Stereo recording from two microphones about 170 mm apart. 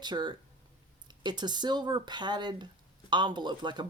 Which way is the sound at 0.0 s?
25° right (ahead or behind).